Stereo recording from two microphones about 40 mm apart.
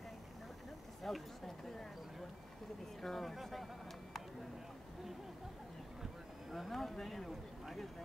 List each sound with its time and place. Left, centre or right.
1.0 s speech: centre
3.0 s speech: centre
6.5 s speech: centre